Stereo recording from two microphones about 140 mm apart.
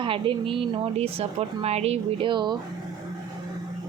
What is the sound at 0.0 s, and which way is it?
A woman's voice, 40° right (ahead or behind).